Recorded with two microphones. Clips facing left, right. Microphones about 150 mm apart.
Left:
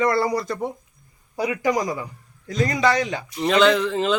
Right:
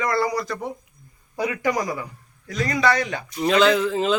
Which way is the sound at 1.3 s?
15° left (ahead or behind).